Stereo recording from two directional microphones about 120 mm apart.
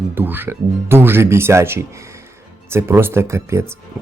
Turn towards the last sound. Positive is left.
turn(degrees=-25)  # may be behind; listen again after turning